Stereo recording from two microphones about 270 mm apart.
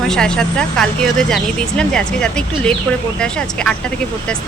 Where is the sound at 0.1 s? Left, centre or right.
Centre.